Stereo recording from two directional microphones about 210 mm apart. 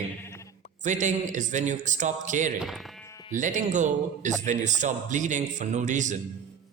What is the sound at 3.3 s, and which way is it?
A man's voice, 35° right (ahead or behind).